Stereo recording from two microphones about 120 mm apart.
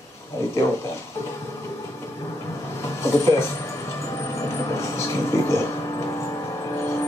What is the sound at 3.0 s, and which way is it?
Speech, 25° left (ahead or behind).